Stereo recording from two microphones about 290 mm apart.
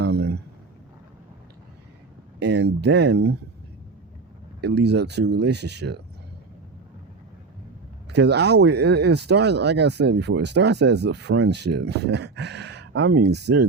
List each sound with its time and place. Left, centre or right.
0.0 s a sound: right
2.4 s speech: right
4.6 s speech: right
8.1 s speech: right